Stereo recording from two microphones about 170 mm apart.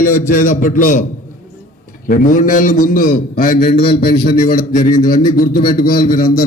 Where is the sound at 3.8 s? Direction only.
35° left (ahead or behind).